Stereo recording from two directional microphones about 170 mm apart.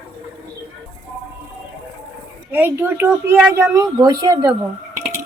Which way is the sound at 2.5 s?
10° right (ahead or behind).